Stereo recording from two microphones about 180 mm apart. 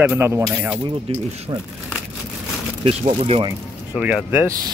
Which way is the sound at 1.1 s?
30° right (ahead or behind).